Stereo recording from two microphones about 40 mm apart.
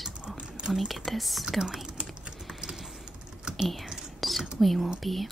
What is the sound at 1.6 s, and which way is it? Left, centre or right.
Speech, centre.